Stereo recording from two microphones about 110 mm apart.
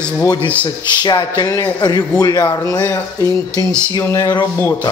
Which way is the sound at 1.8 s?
35° left (ahead or behind).